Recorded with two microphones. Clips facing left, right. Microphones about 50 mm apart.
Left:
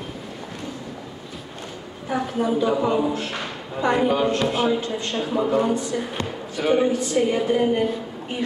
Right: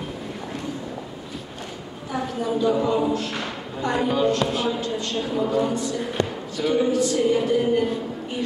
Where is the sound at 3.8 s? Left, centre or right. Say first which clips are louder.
Left 2 dB; left.